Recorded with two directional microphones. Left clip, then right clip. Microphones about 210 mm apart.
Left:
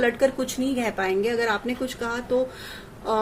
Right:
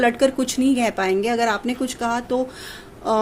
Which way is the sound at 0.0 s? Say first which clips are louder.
Right 3 dB; 45° right (ahead or behind).